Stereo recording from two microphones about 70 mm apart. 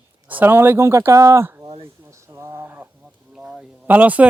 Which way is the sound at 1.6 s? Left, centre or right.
Right.